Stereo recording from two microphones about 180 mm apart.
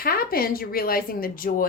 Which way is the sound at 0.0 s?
55° left (ahead or behind).